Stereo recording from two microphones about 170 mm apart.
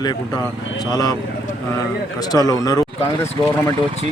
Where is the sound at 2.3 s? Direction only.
20° left (ahead or behind).